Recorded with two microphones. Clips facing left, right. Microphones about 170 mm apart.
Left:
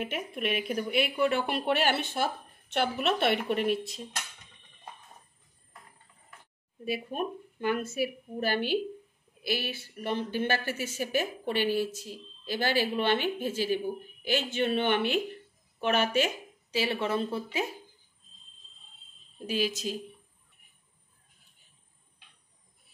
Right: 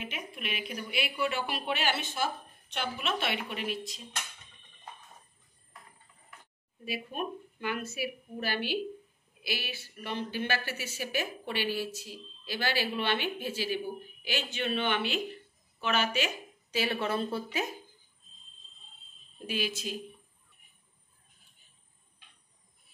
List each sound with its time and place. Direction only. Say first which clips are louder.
0.0 s speech: left 7 dB; 50° left (ahead or behind)
6.8 s speech: left 4 dB; 45° left (ahead or behind)
16.7 s speech: left 2 dB; 30° left (ahead or behind)
19.4 s a woman's voice: left 4 dB; 40° left (ahead or behind)